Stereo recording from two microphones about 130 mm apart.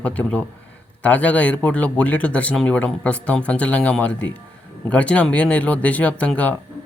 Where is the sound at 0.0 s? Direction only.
10° left (ahead or behind).